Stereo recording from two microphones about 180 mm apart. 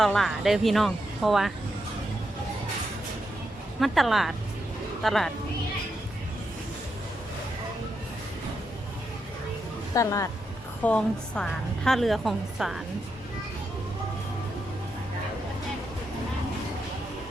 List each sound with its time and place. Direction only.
0.0 s a woman's voice: centre (ahead or behind)
3.8 s a woman's voice: centre (ahead or behind)
9.9 s speech: 15° left (ahead or behind)
10.8 s a woman's voice: 5° left (ahead or behind)